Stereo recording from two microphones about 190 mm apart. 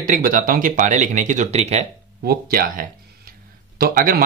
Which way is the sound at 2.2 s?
55° right (ahead or behind).